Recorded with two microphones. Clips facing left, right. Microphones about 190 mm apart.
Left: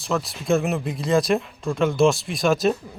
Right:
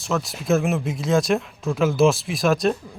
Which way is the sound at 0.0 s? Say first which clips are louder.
Even; centre (ahead or behind).